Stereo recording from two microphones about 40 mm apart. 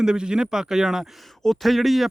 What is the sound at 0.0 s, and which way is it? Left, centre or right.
Speech, centre.